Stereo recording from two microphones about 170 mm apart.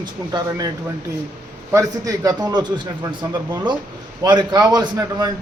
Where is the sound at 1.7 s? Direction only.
20° right (ahead or behind).